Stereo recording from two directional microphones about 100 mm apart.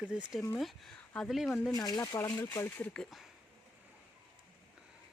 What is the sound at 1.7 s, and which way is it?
Speech, 40° left (ahead or behind).